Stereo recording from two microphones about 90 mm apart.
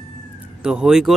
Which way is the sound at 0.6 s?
5° right (ahead or behind).